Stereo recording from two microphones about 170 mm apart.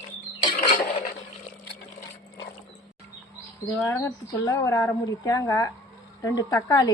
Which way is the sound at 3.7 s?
10° left (ahead or behind).